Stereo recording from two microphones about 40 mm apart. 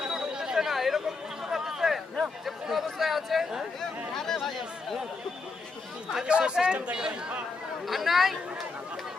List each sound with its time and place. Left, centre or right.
0.0 s chatter: centre
0.7 s a sound: centre
2.6 s chatter: centre
3.8 s a sound: centre
6.2 s speech: right
7.9 s speech: centre